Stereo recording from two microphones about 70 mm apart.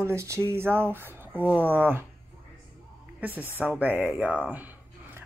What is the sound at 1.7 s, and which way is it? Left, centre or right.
Speech, right.